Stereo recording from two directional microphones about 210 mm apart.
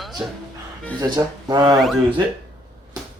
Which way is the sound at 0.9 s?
20° right (ahead or behind).